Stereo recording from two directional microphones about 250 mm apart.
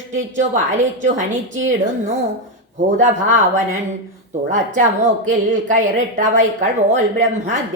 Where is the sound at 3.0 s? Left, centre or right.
Right.